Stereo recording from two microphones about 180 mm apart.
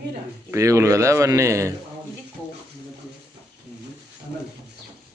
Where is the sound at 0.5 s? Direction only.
15° right (ahead or behind).